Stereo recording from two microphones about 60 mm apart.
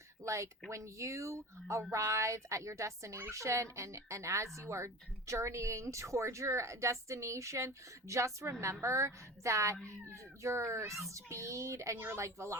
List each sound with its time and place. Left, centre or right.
0.2 s a child's voice: right
11.9 s speech: right
12.2 s a child's voice: right